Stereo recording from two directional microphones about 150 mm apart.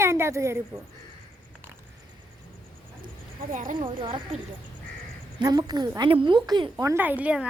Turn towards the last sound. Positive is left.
turn(degrees=-10)  # may be behind; listen again after turning